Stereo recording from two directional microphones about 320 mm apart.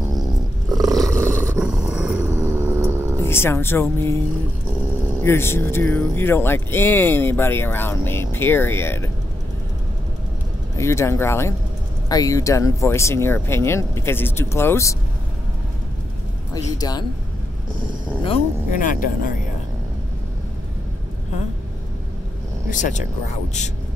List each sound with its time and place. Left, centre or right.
0.9 s a sound: centre
3.2 s speech: centre
5.2 s speech: centre
10.8 s speech: centre
16.5 s speech: centre
18.2 s speech: left
22.7 s speech: left